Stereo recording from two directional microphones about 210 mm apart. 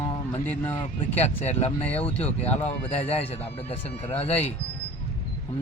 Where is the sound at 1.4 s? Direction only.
30° left (ahead or behind).